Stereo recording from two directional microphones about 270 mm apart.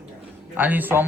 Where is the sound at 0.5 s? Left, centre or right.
Centre.